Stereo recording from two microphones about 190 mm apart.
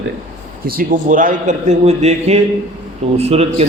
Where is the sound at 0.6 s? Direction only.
50° right (ahead or behind); by 3.6 s 30° right (ahead or behind).